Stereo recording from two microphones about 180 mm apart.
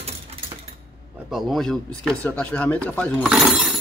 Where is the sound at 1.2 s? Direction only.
Centre (ahead or behind).